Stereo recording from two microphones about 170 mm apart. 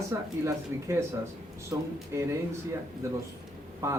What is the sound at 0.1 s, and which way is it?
Speech, 15° right (ahead or behind).